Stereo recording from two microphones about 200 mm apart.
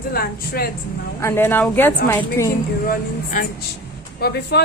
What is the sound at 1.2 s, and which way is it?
A woman's voice, 10° left (ahead or behind).